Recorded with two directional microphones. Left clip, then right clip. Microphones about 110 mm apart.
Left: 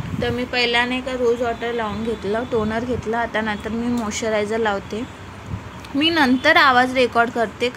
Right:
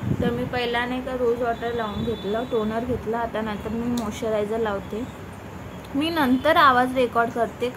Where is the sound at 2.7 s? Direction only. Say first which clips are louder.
Left 3 dB; 40° left (ahead or behind).